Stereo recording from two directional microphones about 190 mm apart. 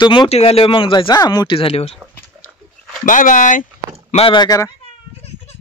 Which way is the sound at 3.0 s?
45° left (ahead or behind).